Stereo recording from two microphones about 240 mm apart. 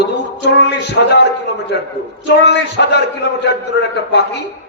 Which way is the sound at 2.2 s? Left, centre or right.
Left.